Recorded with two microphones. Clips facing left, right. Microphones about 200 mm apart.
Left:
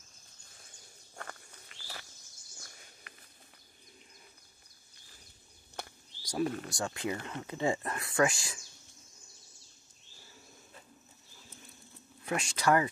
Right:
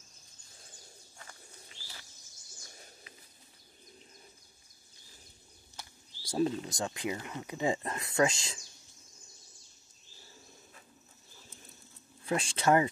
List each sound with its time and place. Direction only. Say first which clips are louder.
1.1 s walk: left 9 dB; 60° left (ahead or behind)
3.1 s walk: right 1 dB; 60° left (ahead or behind)
5.8 s a sound: left 7 dB; 55° left (ahead or behind)
6.2 s speech: right 2 dB; 25° right (ahead or behind)
12.3 s speech: right 1 dB; 30° right (ahead or behind)